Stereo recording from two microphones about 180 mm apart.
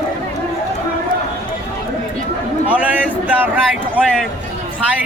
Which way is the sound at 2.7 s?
5° right (ahead or behind).